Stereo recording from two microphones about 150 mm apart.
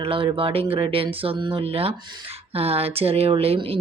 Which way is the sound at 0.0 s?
35° right (ahead or behind).